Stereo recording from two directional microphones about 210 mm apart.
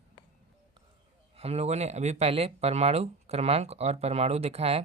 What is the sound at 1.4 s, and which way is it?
Speech, 30° right (ahead or behind).